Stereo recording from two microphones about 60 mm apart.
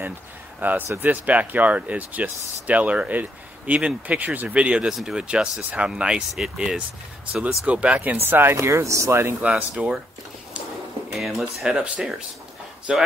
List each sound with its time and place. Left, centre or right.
0.6 s speech: right
4.8 s speech: centre
7.6 s speech: centre
8.2 s speech: right
8.5 s speech: right
9.4 s speech: right
11.1 s speech: centre
12.9 s speech: centre